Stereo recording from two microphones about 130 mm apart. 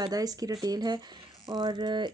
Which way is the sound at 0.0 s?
30° right (ahead or behind).